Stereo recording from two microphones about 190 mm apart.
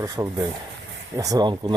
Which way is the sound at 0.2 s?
15° right (ahead or behind).